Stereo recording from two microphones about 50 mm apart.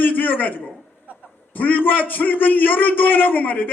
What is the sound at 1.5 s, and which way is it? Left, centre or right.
A man's voice, left.